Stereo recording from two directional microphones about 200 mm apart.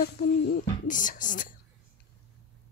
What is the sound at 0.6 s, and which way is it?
Speech, 40° left (ahead or behind).